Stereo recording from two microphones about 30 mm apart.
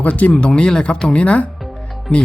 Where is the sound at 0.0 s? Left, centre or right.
Left.